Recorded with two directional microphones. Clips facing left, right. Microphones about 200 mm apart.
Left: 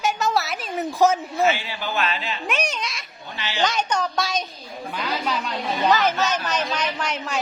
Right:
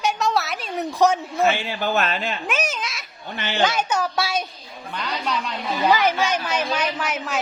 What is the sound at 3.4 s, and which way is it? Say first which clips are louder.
Speech: right 3 dB; 55° right (ahead or behind).